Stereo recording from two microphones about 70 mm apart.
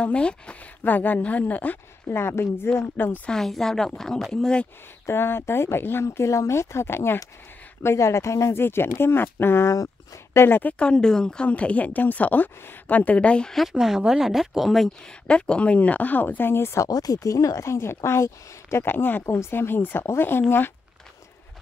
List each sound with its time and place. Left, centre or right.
0.0 s speech: centre
0.8 s speech: left
2.1 s speech: left
3.3 s speech: centre
5.0 s speech: left; by 13.5 s centre
13.5 s speech: centre
15.2 s speech: centre; by 16.8 s left
16.8 s speech: left